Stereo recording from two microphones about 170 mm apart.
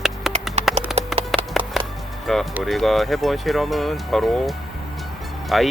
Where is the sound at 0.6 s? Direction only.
40° right (ahead or behind).